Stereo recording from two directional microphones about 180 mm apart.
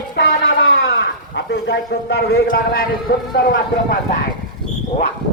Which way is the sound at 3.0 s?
65° left (ahead or behind).